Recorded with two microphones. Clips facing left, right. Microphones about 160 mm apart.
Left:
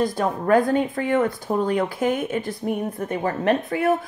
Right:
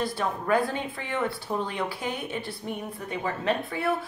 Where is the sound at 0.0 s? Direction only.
45° left (ahead or behind).